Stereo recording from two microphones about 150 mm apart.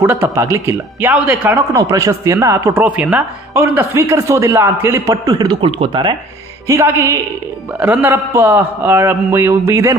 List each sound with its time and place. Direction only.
0.0 s a man's voice: 15° right (ahead or behind)
1.7 s speech: 20° right (ahead or behind)
6.7 s a man's voice: 20° right (ahead or behind)